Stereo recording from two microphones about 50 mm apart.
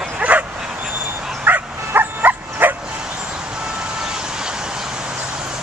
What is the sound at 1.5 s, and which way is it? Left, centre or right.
Bow-wow, right.